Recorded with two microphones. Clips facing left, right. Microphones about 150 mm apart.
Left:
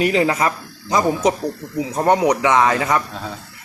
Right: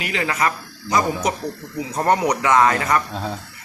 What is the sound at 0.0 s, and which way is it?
Speech, 35° left (ahead or behind).